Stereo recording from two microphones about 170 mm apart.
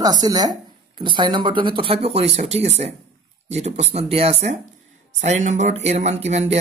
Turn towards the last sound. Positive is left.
turn(degrees=-40)  # may be behind; listen again after turning